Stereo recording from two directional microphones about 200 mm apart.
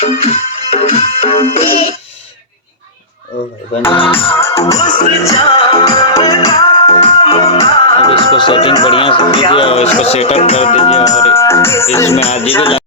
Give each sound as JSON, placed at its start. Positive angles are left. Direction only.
{"t": 0.0, "sound": "music", "side_deg": 30}
{"t": 4.4, "sound": "music", "side_deg": 15}
{"t": 11.3, "sound": "music", "side_deg": 15}
{"t": 12.1, "sound": "music", "side_deg": 30}